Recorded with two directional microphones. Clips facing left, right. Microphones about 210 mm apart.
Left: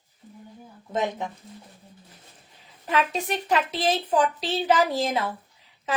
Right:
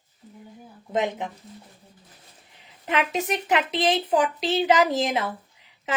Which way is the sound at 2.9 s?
20° right (ahead or behind).